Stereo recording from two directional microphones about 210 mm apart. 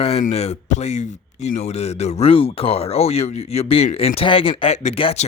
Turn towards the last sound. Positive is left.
turn(degrees=25)  # may be behind; listen again after turning